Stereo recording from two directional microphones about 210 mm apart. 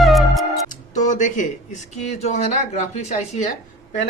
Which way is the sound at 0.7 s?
35° left (ahead or behind).